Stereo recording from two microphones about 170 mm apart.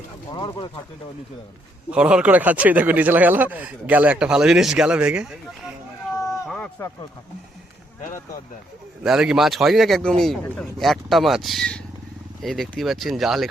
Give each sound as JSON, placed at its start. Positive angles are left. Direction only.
{"t": 0.3, "sound": "speech", "side_deg": 25}
{"t": 1.9, "sound": "speech", "side_deg": -5}
{"t": 6.5, "sound": "a sound", "side_deg": 10}
{"t": 9.0, "sound": "speech", "side_deg": -5}